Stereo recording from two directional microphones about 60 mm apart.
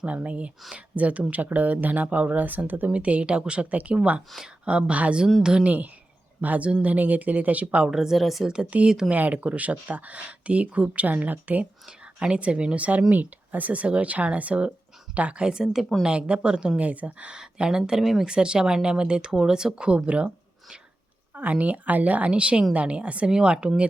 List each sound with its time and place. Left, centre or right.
0.0 s speech: right
6.4 s speech: right
7.9 s speech: centre
9.1 s speech: right
11.9 s speech: centre
18.3 s speech: centre
21.3 s speech: right